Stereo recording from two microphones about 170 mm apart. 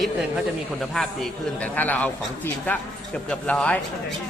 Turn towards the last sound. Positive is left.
turn(degrees=5)  # may be behind; listen again after turning